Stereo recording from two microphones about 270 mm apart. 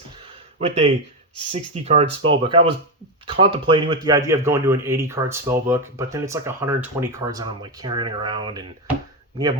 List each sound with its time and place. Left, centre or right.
0.6 s speech: right